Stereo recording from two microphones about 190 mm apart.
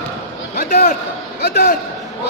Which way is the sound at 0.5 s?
50° left (ahead or behind).